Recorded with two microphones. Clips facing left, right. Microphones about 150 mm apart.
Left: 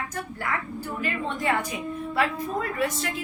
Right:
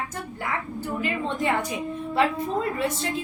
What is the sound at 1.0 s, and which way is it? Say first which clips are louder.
A woman's voice: right 3 dB; 20° right (ahead or behind).